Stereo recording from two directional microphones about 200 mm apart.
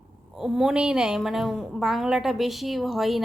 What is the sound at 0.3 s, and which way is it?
A woman's voice, 5° right (ahead or behind).